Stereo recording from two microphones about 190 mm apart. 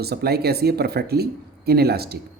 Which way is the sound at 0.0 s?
55° right (ahead or behind).